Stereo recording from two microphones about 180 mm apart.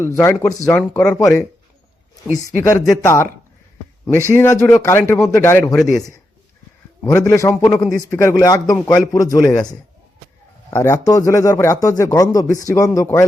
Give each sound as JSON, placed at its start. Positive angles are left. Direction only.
{"t": 0.0, "sound": "speech", "side_deg": 15}
{"t": 2.6, "sound": "speech", "side_deg": 15}
{"t": 7.0, "sound": "a man's voice", "side_deg": 15}